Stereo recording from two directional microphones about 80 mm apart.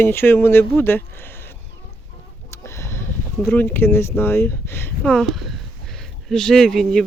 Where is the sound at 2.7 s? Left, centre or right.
Left.